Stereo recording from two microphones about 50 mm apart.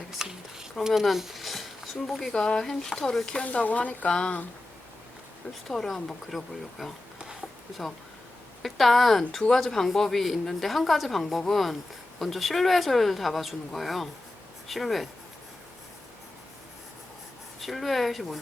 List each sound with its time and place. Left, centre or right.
0.2 s a sound: centre
0.9 s speech: centre
2.3 s speech: centre
3.4 s speech: left
5.6 s speech: centre
8.6 s speech: centre
17.6 s speech: centre